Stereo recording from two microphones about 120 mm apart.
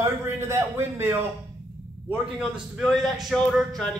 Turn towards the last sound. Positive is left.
turn(degrees=0)  # may be behind; listen again after turning